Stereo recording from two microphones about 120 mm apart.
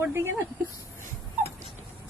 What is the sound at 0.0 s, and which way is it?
Speech, 20° right (ahead or behind).